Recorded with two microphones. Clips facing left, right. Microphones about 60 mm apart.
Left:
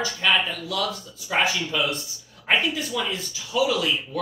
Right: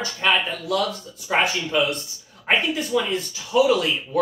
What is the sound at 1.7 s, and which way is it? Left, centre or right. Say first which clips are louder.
Speech: right 4 dB; right.